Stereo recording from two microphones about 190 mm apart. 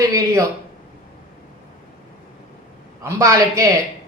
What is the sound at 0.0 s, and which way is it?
Speech, 15° right (ahead or behind).